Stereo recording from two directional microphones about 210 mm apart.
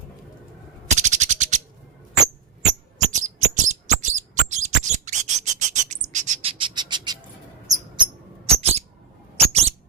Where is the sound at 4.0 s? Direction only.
35° right (ahead or behind).